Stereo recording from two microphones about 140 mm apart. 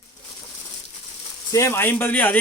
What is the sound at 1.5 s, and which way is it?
Speech, 20° left (ahead or behind).